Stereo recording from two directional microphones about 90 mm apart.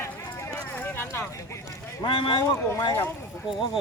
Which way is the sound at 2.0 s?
65° left (ahead or behind).